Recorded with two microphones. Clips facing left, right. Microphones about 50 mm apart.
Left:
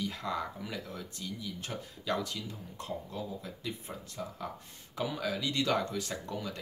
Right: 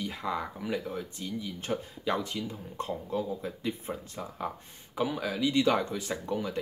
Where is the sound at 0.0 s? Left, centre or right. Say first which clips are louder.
Right 2 dB; centre.